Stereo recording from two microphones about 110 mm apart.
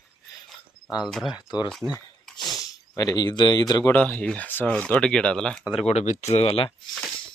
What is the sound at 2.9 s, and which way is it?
Speech, 35° left (ahead or behind).